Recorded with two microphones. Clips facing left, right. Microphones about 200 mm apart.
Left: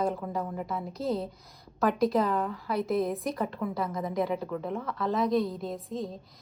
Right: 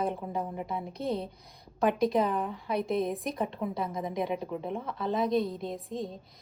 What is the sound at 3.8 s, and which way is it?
A woman's voice, 15° right (ahead or behind).